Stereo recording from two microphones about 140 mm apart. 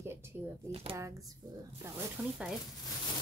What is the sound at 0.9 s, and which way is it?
Speech, 20° right (ahead or behind).